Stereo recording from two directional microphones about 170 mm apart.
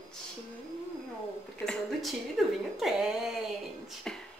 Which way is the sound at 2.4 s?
Centre (ahead or behind).